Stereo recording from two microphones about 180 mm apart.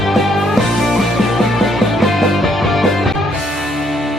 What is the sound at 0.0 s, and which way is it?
Music, centre (ahead or behind).